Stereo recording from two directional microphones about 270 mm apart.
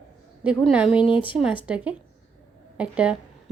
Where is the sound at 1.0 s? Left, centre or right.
Centre.